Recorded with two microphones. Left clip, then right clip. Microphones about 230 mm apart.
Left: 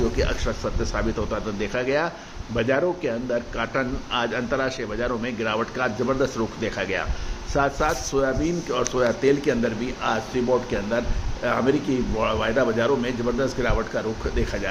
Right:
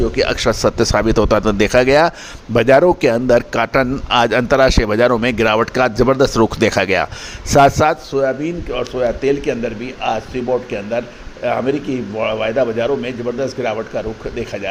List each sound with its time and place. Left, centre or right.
0.2 s a man's voice: right
8.1 s a man's voice: right
8.7 s speech: centre
11.4 s speech: centre